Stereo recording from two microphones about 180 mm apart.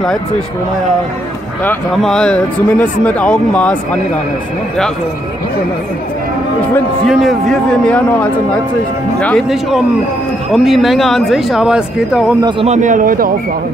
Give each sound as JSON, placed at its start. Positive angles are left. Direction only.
{"t": 1.6, "sound": "speech", "side_deg": 5}
{"t": 7.1, "sound": "speech", "side_deg": 0}
{"t": 12.4, "sound": "speech", "side_deg": -25}
{"t": 12.6, "sound": "a man's voice", "side_deg": -40}